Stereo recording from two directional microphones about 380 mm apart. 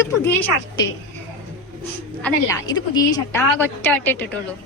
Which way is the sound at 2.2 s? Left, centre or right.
Centre.